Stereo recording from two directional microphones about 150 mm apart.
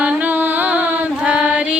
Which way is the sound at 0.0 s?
10° right (ahead or behind).